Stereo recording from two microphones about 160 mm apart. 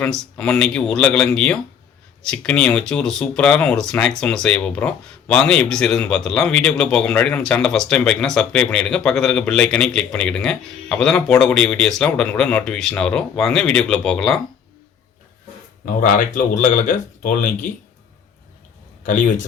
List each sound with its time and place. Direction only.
0.0 s speech: 5° left (ahead or behind)
16.0 s speech: 55° left (ahead or behind)
19.0 s speech: 55° left (ahead or behind)